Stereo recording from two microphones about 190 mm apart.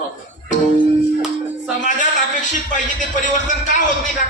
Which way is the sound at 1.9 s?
40° left (ahead or behind).